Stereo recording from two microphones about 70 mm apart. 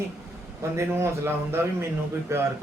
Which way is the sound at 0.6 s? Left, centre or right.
Right.